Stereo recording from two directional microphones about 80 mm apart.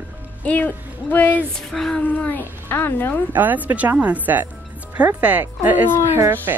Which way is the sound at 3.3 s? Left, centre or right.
Right.